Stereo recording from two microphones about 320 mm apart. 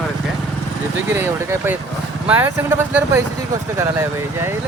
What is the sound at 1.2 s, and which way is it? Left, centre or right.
Speech, centre.